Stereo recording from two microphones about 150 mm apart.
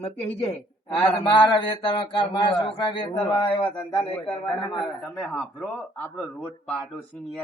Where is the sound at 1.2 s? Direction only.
30° left (ahead or behind).